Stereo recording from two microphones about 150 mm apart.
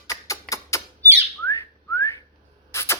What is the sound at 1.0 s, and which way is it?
Bird, 15° right (ahead or behind).